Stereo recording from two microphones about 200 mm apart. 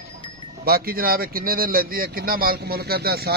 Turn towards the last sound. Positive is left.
turn(degrees=-50)  # may be behind; listen again after turning